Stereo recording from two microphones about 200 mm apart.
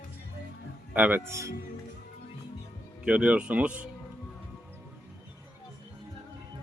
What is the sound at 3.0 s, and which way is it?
Speech, 5° right (ahead or behind).